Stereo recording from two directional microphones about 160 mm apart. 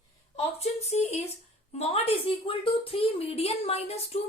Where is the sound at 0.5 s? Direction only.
40° left (ahead or behind).